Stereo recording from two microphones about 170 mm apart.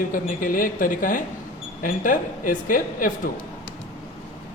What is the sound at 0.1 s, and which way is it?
A woman's voice, 55° left (ahead or behind).